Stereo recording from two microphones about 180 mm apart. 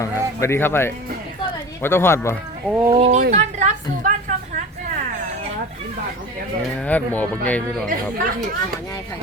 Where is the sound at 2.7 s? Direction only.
30° right (ahead or behind).